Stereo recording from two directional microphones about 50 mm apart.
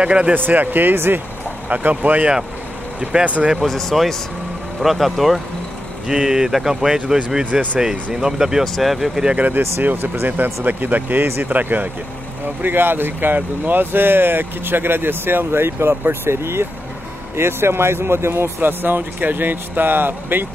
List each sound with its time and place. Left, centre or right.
0.0 s speech: right
0.3 s speech: right
0.9 s speech: right
1.7 s speech: right
3.6 s speech: centre
6.0 s speech: centre
9.8 s speech: right
12.6 s speech: right
18.6 s speech: right